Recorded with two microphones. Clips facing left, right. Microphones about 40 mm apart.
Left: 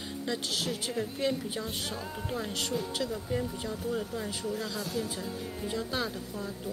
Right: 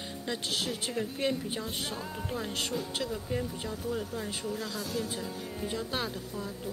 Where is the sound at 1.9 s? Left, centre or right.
Centre.